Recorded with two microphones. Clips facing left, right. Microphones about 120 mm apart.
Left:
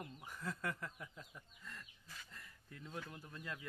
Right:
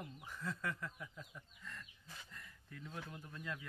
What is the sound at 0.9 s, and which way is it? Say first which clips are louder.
Speech: right 1 dB; 35° left (ahead or behind).